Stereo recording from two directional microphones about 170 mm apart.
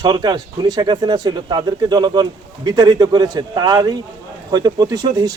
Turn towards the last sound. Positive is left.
turn(degrees=-25)  # may be behind; listen again after turning